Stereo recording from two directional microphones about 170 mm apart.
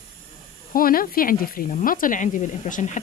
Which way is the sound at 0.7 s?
60° left (ahead or behind).